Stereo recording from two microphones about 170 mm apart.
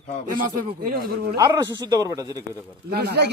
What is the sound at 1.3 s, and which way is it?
Speech, 25° right (ahead or behind).